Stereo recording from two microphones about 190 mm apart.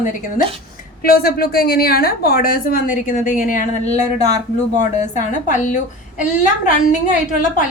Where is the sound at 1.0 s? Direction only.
50° left (ahead or behind).